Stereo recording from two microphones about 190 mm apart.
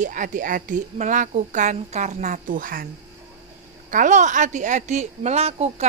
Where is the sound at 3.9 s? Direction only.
40° right (ahead or behind).